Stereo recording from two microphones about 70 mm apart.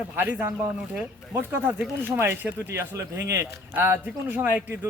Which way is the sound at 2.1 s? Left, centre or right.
Right.